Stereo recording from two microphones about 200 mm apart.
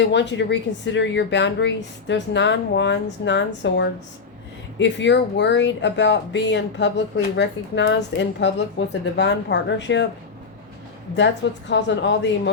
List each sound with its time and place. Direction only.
0.0 s speech: 60° left (ahead or behind)
11.7 s speech: 65° left (ahead or behind)